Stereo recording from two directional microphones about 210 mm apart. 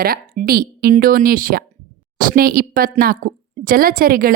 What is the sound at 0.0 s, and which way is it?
A woman's voice, 45° right (ahead or behind).